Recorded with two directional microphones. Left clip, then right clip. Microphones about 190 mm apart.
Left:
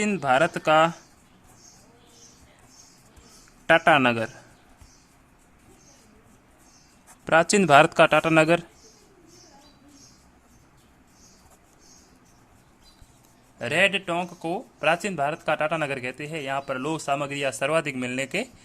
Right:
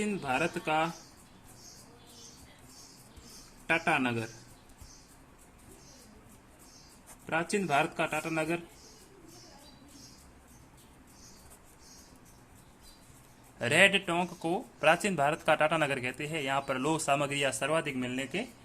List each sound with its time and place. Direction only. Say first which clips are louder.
0.0 s a man's voice: left 10 dB; 50° left (ahead or behind)
3.7 s a man's voice: left 11 dB; 50° left (ahead or behind)
7.3 s a man's voice: left 13 dB; 55° left (ahead or behind)
13.6 s speech: left 2 dB; 15° left (ahead or behind)
17.7 s speech: left 6 dB; 30° left (ahead or behind)